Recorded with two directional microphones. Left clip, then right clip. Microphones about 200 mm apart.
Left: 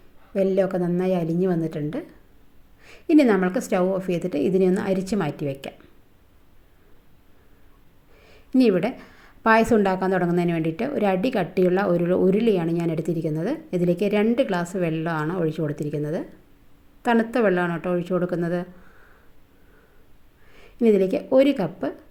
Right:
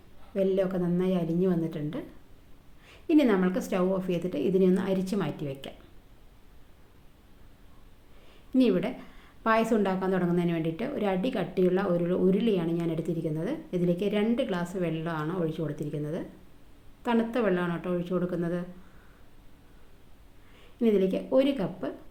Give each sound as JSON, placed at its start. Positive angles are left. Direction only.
{"t": 0.3, "sound": "a woman's voice", "side_deg": 40}
{"t": 8.3, "sound": "a woman's voice", "side_deg": 40}
{"t": 20.6, "sound": "a woman's voice", "side_deg": 40}